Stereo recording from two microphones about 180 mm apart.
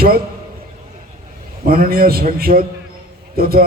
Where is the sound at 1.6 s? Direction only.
55° right (ahead or behind).